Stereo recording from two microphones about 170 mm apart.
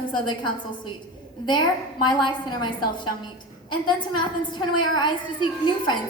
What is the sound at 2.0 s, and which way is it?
A woman's voice, 25° left (ahead or behind).